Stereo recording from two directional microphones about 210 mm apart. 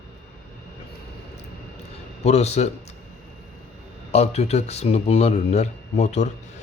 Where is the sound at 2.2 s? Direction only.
30° left (ahead or behind).